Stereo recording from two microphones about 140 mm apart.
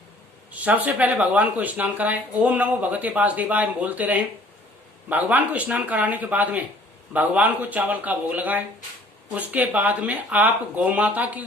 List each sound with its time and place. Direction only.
0.6 s speech: 10° right (ahead or behind)